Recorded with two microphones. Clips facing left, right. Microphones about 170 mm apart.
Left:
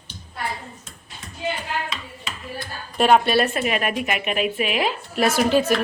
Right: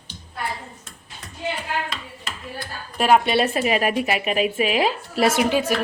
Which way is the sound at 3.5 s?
35° right (ahead or behind).